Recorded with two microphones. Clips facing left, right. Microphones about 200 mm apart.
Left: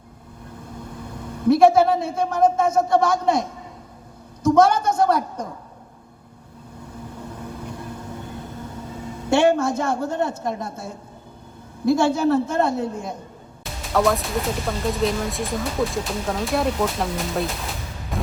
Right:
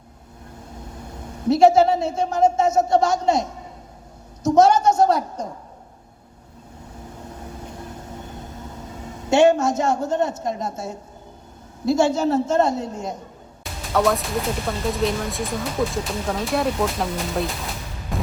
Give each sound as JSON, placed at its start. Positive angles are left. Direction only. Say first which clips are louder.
{"t": 1.5, "sound": "speech", "louder": "even", "side_deg": 55}
{"t": 4.4, "sound": "a woman's voice", "louder": "right 1 dB", "side_deg": 55}
{"t": 9.3, "sound": "speech", "louder": "right 2 dB", "side_deg": 55}
{"t": 13.9, "sound": "speech", "louder": "even", "side_deg": 0}
{"t": 18.1, "sound": "a sound", "louder": "even", "side_deg": 0}